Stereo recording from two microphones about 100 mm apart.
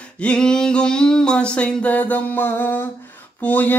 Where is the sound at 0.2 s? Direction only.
10° left (ahead or behind).